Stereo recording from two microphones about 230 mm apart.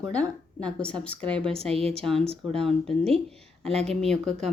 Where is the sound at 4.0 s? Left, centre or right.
Centre.